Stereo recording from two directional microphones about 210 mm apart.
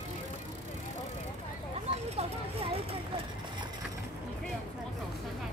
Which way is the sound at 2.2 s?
25° right (ahead or behind).